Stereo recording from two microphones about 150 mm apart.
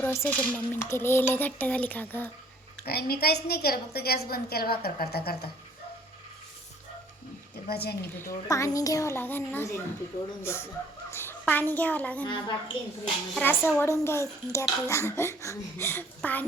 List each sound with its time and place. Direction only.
0.0 s a child's voice: 15° left (ahead or behind)
2.8 s a woman's voice: 90° left
7.7 s a woman's voice: 90° left
8.3 s a child's voice: 20° left (ahead or behind)
12.2 s a woman's voice: 35° left (ahead or behind)
13.4 s a child's voice: 15° left (ahead or behind)